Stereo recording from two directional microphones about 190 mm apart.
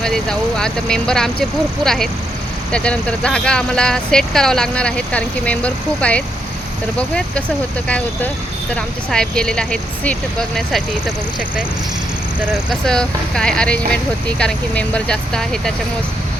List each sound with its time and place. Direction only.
0.0 s speech: 5° left (ahead or behind)
12.8 s speech: 5° left (ahead or behind)